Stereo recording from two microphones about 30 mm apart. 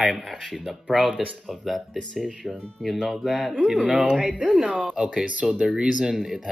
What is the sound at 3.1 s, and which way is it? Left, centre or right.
Speech, centre.